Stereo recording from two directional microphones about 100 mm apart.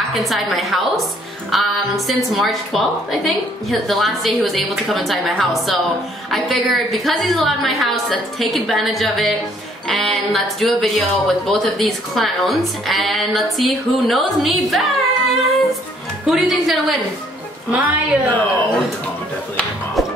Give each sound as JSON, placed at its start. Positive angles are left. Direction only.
{"t": 0.1, "sound": "speech", "side_deg": 0}
{"t": 17.6, "sound": "a woman's voice", "side_deg": -15}
{"t": 18.3, "sound": "speech", "side_deg": 15}